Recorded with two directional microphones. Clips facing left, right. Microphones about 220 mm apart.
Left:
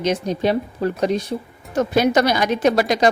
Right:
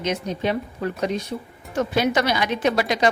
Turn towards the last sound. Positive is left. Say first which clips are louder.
# left 4 dB
turn(degrees=40)  # may be behind; listen again after turning